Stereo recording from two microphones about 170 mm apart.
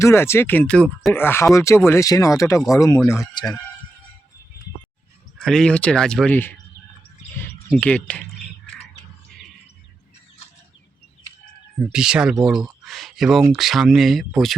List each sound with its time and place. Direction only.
0.0 s speech: 15° left (ahead or behind)
5.4 s speech: 5° left (ahead or behind)
11.9 s speech: 5° right (ahead or behind)